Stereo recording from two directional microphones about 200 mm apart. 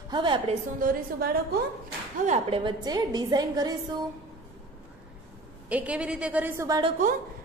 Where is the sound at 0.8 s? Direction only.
50° right (ahead or behind).